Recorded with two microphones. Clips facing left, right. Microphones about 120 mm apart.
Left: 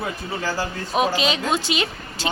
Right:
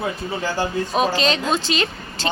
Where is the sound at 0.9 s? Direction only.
10° left (ahead or behind).